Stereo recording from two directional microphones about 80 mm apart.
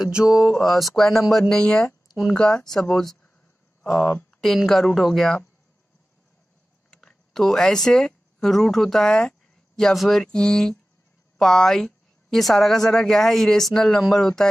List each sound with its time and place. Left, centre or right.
0.2 s speech: centre
0.6 s a woman's voice: centre
6.9 s a woman's voice: centre